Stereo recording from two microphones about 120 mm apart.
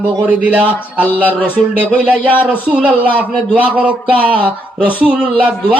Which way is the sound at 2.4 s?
10° right (ahead or behind).